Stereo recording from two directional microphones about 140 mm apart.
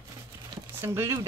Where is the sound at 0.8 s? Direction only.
20° right (ahead or behind).